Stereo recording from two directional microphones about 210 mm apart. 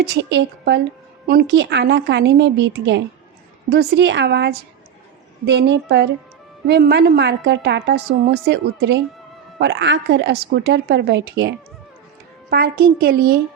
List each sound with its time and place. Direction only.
0.0 s a woman's voice: 55° right (ahead or behind)